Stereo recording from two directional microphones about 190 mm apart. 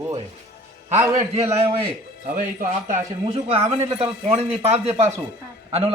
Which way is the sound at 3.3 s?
30° right (ahead or behind).